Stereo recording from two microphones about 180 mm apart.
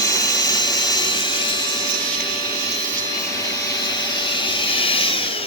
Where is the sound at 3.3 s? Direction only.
20° left (ahead or behind).